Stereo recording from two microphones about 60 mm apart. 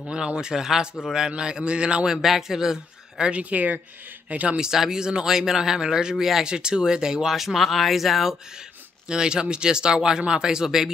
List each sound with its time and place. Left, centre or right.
0.1 s speech: centre
2.2 s speech: centre; by 4.6 s right
4.6 s speech: centre
9.0 s speech: centre